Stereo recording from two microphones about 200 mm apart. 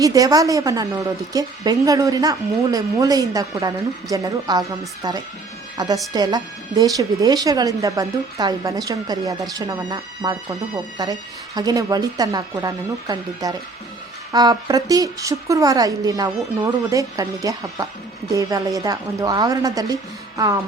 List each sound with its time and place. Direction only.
0.0 s a woman's voice: 15° right (ahead or behind)